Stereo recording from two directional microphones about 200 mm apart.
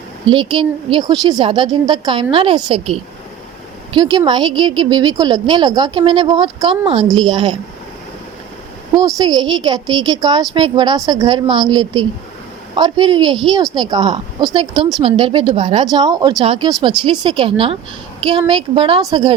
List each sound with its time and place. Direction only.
0.3 s a woman's voice: 25° right (ahead or behind)
9.0 s a woman's voice: 20° right (ahead or behind)